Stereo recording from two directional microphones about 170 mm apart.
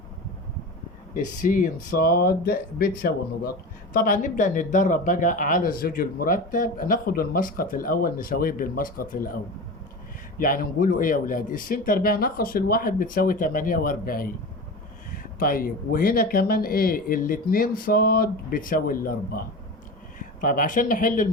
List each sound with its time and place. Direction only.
1.1 s speech: 50° left (ahead or behind)